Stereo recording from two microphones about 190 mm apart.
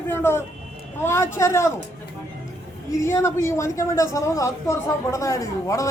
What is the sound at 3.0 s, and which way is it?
A woman's voice, 15° left (ahead or behind).